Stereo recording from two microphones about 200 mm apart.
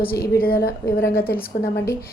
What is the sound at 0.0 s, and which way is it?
A woman's voice, 50° left (ahead or behind).